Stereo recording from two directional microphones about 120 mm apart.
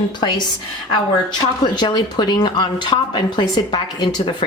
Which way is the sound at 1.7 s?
40° left (ahead or behind).